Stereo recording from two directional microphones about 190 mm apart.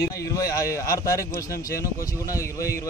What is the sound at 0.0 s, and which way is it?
Speech, 15° left (ahead or behind).